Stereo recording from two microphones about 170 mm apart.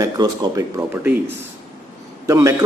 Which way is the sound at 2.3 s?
20° right (ahead or behind).